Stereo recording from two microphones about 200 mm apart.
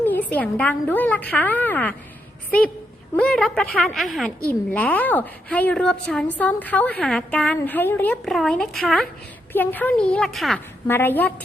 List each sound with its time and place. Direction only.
0.0 s a woman's voice: 10° left (ahead or behind)
3.2 s a woman's voice: 5° left (ahead or behind)